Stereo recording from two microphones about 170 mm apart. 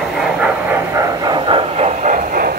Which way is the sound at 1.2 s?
30° right (ahead or behind).